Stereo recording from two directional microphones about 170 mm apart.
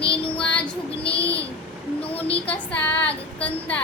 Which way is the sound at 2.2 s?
35° left (ahead or behind).